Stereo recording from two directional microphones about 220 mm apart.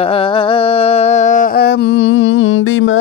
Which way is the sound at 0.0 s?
25° left (ahead or behind).